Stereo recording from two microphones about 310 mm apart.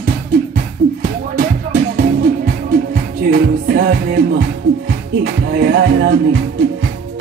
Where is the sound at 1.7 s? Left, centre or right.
Right.